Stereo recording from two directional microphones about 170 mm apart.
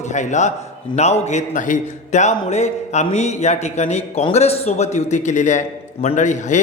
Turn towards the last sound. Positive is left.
turn(degrees=45)  # may be behind; listen again after turning